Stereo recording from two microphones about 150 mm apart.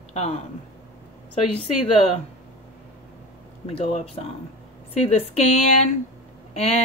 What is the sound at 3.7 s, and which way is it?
Speech, 40° left (ahead or behind).